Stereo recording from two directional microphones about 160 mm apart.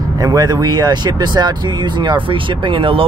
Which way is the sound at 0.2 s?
25° right (ahead or behind).